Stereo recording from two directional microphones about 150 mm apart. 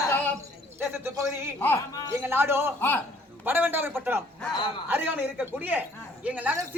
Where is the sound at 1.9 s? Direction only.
25° left (ahead or behind).